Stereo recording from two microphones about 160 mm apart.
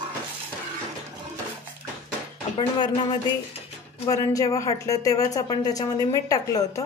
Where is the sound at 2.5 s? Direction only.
30° left (ahead or behind).